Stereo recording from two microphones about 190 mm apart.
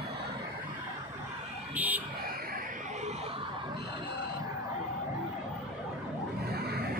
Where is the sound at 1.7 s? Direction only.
10° right (ahead or behind).